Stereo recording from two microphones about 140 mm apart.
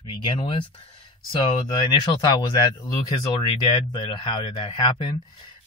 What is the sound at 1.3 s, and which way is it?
Speech, 35° left (ahead or behind).